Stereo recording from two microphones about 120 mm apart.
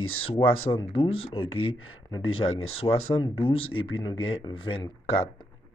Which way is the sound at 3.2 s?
50° left (ahead or behind).